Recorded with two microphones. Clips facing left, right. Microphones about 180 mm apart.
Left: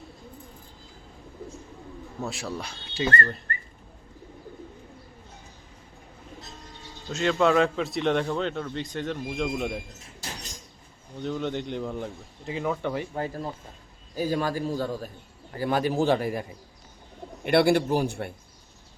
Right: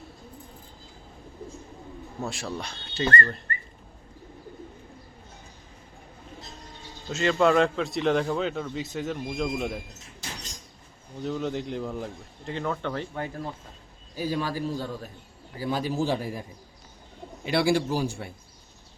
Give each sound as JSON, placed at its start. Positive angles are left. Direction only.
{"t": 2.2, "sound": "a man's voice", "side_deg": 0}
{"t": 7.1, "sound": "a man's voice", "side_deg": 0}
{"t": 11.2, "sound": "a man's voice", "side_deg": 0}
{"t": 13.1, "sound": "speech", "side_deg": 35}
{"t": 14.2, "sound": "a man's voice", "side_deg": 45}
{"t": 15.5, "sound": "a man's voice", "side_deg": 60}